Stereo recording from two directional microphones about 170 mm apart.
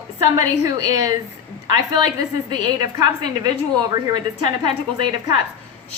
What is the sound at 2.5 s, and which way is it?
A woman's voice, 25° right (ahead or behind).